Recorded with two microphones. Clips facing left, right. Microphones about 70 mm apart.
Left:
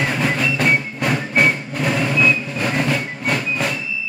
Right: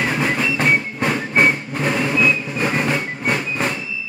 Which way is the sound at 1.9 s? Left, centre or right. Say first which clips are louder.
Even; centre.